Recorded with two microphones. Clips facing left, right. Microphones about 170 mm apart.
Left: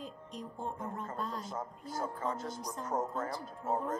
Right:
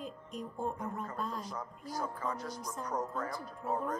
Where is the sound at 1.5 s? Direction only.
25° left (ahead or behind).